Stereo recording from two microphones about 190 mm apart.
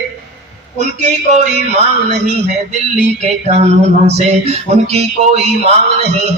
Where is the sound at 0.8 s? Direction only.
35° right (ahead or behind).